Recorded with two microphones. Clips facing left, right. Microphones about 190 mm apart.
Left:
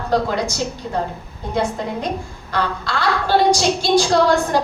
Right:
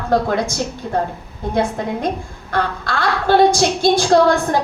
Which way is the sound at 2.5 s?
50° right (ahead or behind).